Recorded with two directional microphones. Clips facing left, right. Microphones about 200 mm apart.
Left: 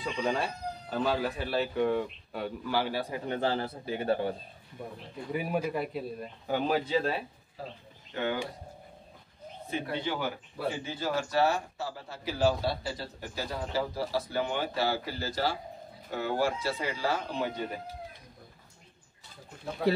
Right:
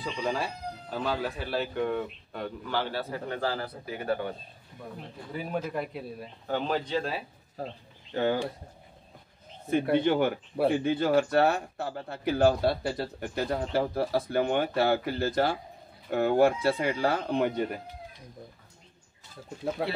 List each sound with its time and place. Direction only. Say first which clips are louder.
0.0 s speech: even; centre (ahead or behind); by 4.4 s 30° left (ahead or behind)
5.3 s a man's voice: left 2 dB; 10° left (ahead or behind)
7.6 s speech: right 5 dB; 45° right (ahead or behind)
9.7 s speech: right 9 dB; 55° right (ahead or behind)